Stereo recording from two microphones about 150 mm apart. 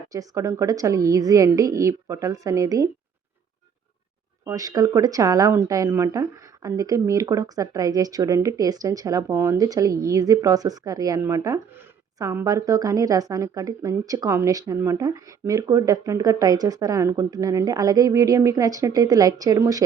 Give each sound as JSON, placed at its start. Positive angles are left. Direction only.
{"t": 0.1, "sound": "speech", "side_deg": -20}
{"t": 4.4, "sound": "speech", "side_deg": -25}